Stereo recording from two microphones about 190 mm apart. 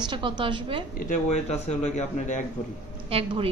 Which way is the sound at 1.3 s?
35° left (ahead or behind).